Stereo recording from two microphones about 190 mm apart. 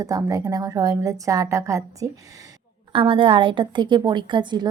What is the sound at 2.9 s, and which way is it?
A woman's voice, 25° right (ahead or behind).